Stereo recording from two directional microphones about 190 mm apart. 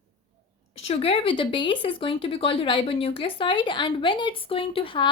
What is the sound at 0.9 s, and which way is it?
Speech, 30° left (ahead or behind).